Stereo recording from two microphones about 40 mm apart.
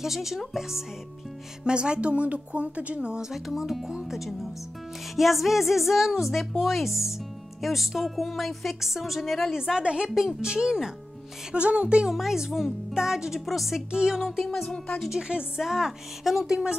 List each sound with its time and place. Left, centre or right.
0.0 s speech: centre
1.6 s speech: right
3.3 s a woman's voice: centre
9.8 s speech: right
11.5 s speech: right
12.1 s speech: centre
13.5 s a woman's voice: centre
13.9 s speech: centre
14.2 s a woman's voice: centre
15.0 s speech: right